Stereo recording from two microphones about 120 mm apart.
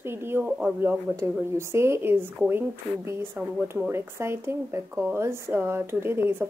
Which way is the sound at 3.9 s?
20° right (ahead or behind).